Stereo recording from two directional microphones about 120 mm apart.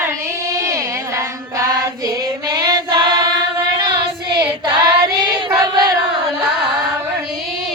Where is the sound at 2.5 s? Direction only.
35° right (ahead or behind).